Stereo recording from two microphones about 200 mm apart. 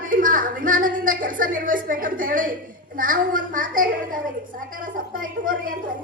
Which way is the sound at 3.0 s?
45° right (ahead or behind).